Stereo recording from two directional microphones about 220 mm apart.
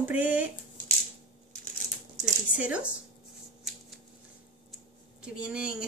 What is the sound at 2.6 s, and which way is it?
Speech, 5° right (ahead or behind).